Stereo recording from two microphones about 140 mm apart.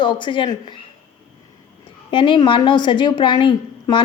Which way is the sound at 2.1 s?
35° left (ahead or behind).